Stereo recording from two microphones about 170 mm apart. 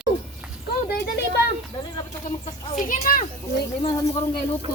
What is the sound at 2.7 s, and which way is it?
Speech, 50° left (ahead or behind).